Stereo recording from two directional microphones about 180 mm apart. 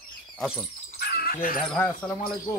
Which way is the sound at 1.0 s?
55° left (ahead or behind).